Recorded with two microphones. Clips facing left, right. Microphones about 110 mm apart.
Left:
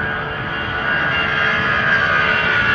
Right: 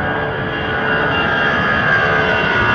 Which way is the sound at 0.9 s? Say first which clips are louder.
Right 4 dB; 20° right (ahead or behind).